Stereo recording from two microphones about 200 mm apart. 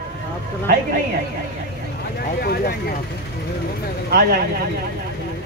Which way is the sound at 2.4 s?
50° left (ahead or behind).